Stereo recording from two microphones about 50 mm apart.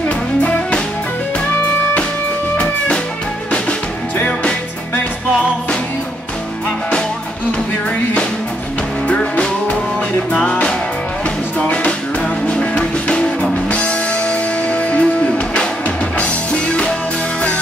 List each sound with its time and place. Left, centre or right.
0.4 s music: left
2.5 s music: left
9.0 s music: left
12.4 s music: centre